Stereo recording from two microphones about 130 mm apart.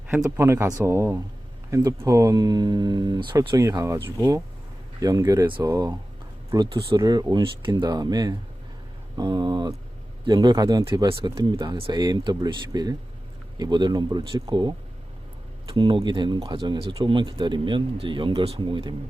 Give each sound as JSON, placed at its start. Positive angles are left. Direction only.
{"t": 0.1, "sound": "speech", "side_deg": -20}